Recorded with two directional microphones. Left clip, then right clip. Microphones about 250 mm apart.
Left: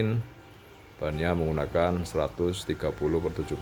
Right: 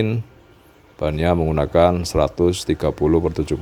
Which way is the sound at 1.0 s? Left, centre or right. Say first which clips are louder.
Right 9 dB; right.